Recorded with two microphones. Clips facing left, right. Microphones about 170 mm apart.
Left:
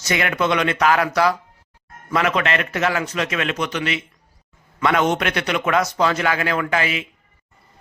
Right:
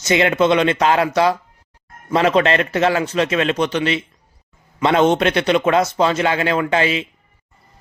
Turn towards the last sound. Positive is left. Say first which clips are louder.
# right 4 dB
turn(degrees=-30)  # may be behind; listen again after turning